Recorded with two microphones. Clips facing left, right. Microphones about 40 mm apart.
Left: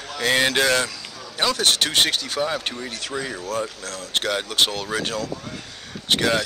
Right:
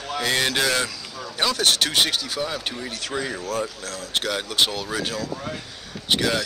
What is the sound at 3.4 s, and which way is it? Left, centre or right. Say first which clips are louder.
Speech: even; left.